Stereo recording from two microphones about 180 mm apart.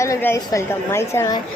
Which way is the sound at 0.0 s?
15° left (ahead or behind).